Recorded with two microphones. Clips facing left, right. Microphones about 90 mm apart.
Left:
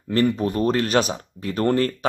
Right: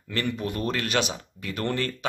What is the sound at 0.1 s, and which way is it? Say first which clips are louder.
Speech: left 8 dB; 35° left (ahead or behind).